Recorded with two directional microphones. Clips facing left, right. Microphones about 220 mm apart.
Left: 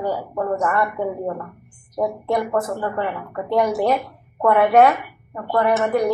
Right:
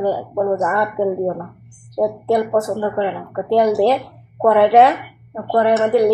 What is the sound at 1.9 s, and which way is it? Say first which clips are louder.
A woman's voice: right 4 dB; 30° right (ahead or behind).